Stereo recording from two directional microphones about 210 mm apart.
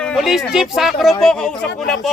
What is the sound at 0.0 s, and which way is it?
Speech, centre (ahead or behind).